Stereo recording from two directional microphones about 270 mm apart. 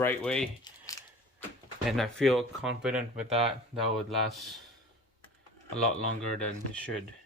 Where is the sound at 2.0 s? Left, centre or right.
Centre.